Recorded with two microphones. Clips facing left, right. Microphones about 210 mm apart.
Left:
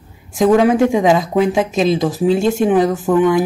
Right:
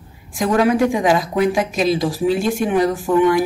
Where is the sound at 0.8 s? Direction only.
25° left (ahead or behind).